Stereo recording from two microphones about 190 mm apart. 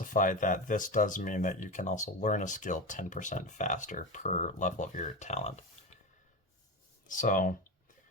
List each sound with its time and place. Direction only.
0.0 s speech: 45° left (ahead or behind)
7.1 s speech: 45° left (ahead or behind)